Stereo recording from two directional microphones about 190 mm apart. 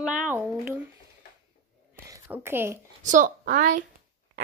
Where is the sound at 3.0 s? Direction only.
45° right (ahead or behind).